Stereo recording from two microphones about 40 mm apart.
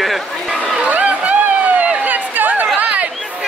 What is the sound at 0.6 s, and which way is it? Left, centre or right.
Speech, right.